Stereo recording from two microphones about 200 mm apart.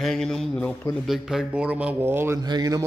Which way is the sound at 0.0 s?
Centre (ahead or behind).